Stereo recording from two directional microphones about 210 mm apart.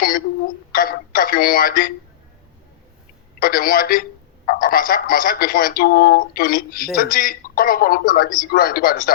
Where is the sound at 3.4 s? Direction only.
45° left (ahead or behind).